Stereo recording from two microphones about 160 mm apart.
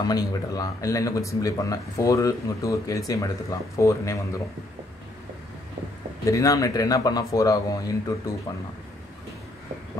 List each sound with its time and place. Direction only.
0.0 s speech: 25° left (ahead or behind)
6.2 s speech: 20° left (ahead or behind)